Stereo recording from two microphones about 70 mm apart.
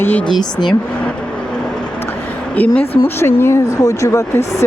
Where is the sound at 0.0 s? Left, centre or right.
Left.